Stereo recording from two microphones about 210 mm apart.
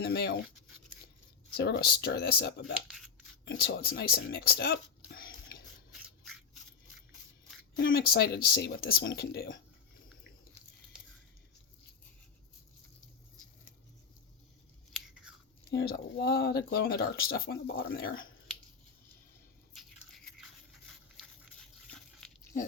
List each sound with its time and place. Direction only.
0.0 s speech: 50° left (ahead or behind)
1.5 s speech: 50° left (ahead or behind)
2.8 s scissors: centre (ahead or behind)
3.4 s speech: 55° left (ahead or behind)
5.9 s rub: centre (ahead or behind)
7.8 s speech: 50° left (ahead or behind)
14.9 s chewing: 5° right (ahead or behind)
15.7 s speech: 50° left (ahead or behind)
20.7 s a sound: centre (ahead or behind)